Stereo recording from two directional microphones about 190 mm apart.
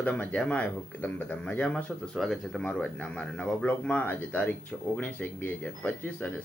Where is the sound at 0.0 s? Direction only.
5° left (ahead or behind).